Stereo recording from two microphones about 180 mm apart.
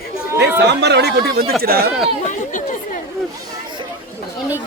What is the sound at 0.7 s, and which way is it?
Speech, 70° right (ahead or behind).